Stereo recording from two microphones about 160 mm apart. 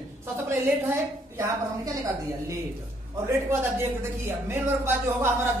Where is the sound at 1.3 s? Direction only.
20° right (ahead or behind).